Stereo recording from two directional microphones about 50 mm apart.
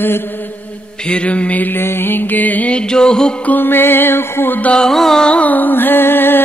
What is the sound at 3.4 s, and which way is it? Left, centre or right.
Music, left.